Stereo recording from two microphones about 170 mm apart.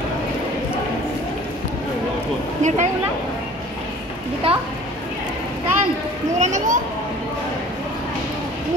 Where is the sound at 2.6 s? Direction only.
45° right (ahead or behind).